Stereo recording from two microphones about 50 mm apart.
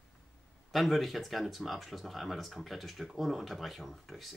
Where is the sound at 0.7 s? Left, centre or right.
Centre.